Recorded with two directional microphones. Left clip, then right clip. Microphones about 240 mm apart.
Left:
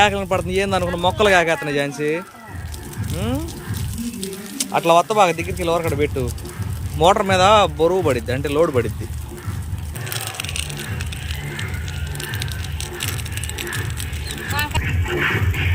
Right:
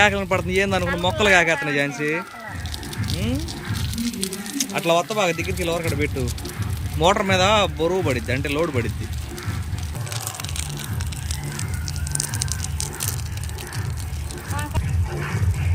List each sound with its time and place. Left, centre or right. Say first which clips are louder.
0.0 s speech: left 1 dB; centre
4.5 s speech: left 5 dB; centre
12.1 s music: even; right